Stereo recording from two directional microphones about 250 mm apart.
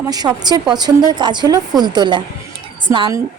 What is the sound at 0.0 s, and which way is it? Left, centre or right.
A woman's voice, centre.